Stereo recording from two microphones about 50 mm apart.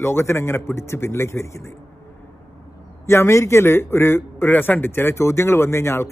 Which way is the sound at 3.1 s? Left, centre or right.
Left.